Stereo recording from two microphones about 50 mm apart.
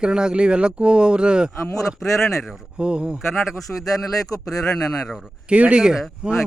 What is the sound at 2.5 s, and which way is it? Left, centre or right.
Speech, right.